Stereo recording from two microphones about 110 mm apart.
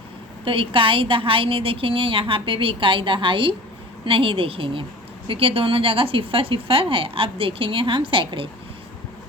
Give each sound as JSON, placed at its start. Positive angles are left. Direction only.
{"t": 0.4, "sound": "a woman's voice", "side_deg": -50}